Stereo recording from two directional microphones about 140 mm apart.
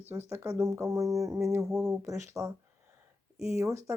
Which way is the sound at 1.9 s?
20° right (ahead or behind).